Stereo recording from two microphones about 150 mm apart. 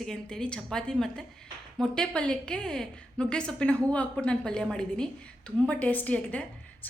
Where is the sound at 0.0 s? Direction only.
5° left (ahead or behind).